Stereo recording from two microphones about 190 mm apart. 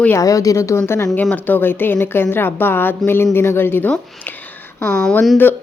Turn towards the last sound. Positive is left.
turn(degrees=10)  # may be behind; listen again after turning